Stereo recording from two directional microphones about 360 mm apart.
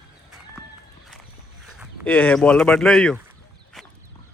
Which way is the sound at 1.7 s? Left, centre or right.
Centre.